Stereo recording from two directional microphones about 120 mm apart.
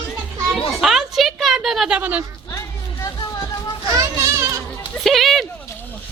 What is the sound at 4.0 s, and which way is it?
Children playing, 25° right (ahead or behind).